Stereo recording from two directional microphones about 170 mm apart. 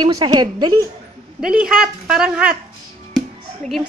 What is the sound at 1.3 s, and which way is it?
Speech, 5° right (ahead or behind).